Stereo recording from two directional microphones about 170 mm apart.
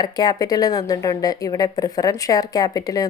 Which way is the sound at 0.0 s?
25° left (ahead or behind).